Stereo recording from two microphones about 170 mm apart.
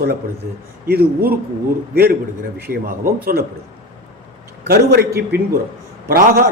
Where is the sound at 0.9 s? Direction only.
70° right (ahead or behind).